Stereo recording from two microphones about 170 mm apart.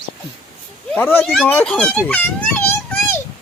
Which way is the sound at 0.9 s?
15° left (ahead or behind).